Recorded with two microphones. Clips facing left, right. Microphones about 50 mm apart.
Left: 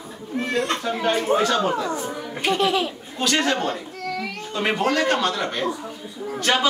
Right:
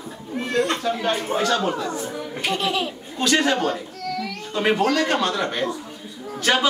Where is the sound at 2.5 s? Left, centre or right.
Left.